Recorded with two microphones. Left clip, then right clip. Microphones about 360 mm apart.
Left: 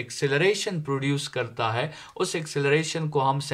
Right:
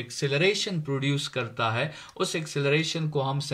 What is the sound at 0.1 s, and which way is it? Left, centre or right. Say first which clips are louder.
Speech: left 2 dB; left.